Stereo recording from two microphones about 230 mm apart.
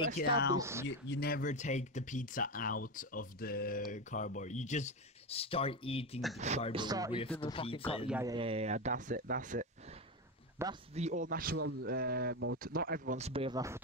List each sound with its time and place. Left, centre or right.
0.5 s speech: centre
0.8 s speech: left
6.7 s speech: centre
7.3 s speech: left
8.1 s speech: centre
8.4 s speech: right
10.6 s speech: centre
11.0 s speech: right